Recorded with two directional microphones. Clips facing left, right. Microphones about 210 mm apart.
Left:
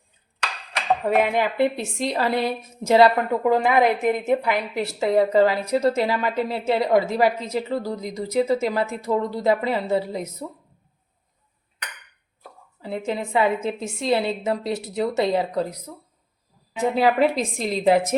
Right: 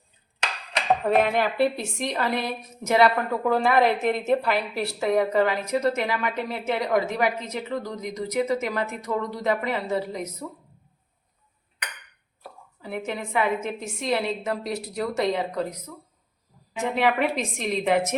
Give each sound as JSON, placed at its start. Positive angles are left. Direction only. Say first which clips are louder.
{"t": 1.2, "sound": "a woman's voice", "louder": "left 1 dB", "side_deg": 15}
{"t": 3.5, "sound": "a woman's voice", "louder": "left 1 dB", "side_deg": 15}
{"t": 13.1, "sound": "a woman's voice", "louder": "left 4 dB", "side_deg": 30}
{"t": 16.9, "sound": "a woman's voice", "louder": "left 4 dB", "side_deg": 35}